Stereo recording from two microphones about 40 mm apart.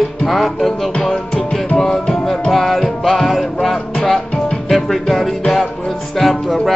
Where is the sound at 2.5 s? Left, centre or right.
Centre.